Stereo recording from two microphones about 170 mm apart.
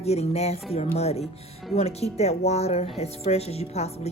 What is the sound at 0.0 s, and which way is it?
A woman's voice, 40° left (ahead or behind).